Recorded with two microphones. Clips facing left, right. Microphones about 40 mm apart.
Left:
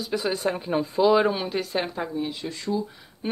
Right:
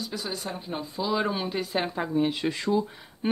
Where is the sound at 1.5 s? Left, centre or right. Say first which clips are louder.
Left 1 dB; centre.